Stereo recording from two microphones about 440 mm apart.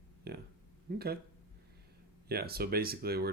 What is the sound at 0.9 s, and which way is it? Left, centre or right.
Speech, right.